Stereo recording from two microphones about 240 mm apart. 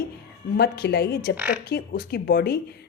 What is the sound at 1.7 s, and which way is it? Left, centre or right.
Speech, left.